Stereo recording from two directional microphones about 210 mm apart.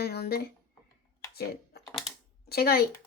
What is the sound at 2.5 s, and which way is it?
Speech, 50° left (ahead or behind).